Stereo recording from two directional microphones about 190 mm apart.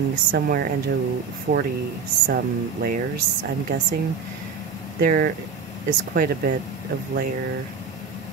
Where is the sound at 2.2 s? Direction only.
50° right (ahead or behind).